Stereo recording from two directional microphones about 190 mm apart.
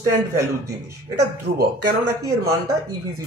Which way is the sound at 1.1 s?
60° right (ahead or behind).